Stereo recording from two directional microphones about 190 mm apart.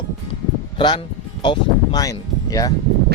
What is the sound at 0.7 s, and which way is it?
Speech, 25° left (ahead or behind).